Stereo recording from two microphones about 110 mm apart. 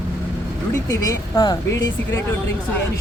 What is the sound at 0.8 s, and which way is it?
Speech, 30° left (ahead or behind).